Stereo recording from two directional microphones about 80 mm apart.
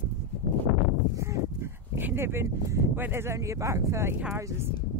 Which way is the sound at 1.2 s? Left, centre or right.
Right.